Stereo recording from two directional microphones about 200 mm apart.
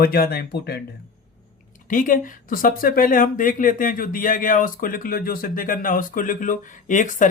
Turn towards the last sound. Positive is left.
turn(degrees=40)  # may be behind; listen again after turning